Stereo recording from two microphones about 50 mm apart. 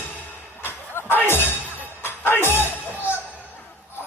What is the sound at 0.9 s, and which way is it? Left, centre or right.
Music, left.